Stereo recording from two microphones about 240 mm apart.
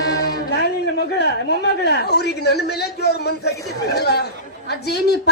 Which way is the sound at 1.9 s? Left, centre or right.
Left.